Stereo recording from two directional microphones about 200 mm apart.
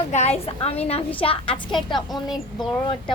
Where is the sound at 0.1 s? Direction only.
30° left (ahead or behind).